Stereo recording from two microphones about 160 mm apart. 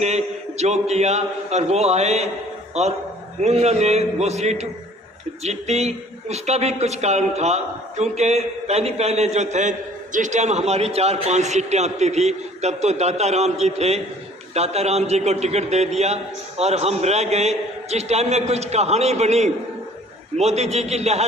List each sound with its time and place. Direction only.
0.0 s speech: 45° right (ahead or behind)
3.4 s a man's voice: 45° right (ahead or behind)